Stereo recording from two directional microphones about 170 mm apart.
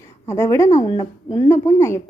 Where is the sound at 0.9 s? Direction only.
25° left (ahead or behind).